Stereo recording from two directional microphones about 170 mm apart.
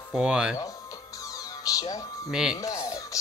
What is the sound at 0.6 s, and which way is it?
Music, 20° left (ahead or behind).